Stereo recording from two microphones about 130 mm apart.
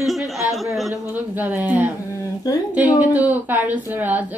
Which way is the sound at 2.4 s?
30° left (ahead or behind).